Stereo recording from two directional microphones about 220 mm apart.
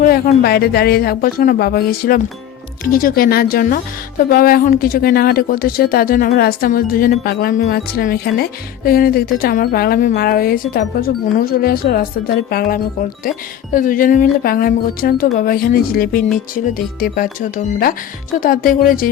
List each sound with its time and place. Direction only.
0.0 s a woman's voice: 45° left (ahead or behind)